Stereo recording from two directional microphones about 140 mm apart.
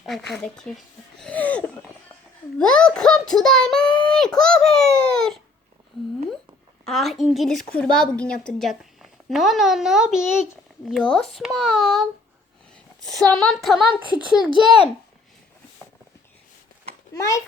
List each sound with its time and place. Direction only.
0.0 s a child's voice: centre (ahead or behind)
1.2 s a sound: 10° left (ahead or behind)
2.6 s a child's voice: 5° left (ahead or behind)
6.8 s a child's voice: centre (ahead or behind)
17.2 s a child's voice: 20° left (ahead or behind)